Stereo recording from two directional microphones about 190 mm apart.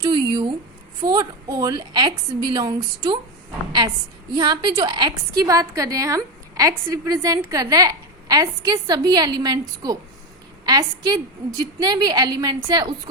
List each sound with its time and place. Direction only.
0.0 s a sound: 25° right (ahead or behind)
1.0 s a woman's voice: 20° right (ahead or behind)
4.3 s a woman's voice: 25° right (ahead or behind)